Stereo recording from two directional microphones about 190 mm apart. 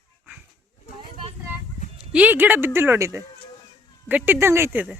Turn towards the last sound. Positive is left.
turn(degrees=-10)  # may be behind; listen again after turning